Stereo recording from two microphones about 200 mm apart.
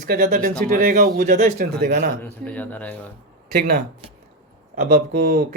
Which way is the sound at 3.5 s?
45° right (ahead or behind).